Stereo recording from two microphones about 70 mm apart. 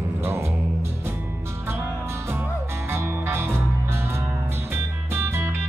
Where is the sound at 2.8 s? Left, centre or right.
Right.